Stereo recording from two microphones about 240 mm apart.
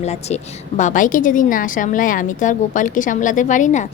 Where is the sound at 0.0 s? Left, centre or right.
Left.